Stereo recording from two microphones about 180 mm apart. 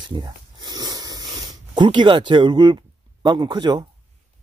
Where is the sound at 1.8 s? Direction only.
25° right (ahead or behind).